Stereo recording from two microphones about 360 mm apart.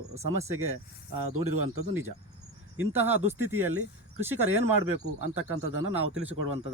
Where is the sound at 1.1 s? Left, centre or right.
Right.